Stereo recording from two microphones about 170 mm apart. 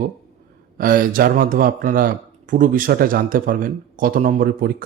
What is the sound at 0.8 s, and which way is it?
Speech, 55° right (ahead or behind).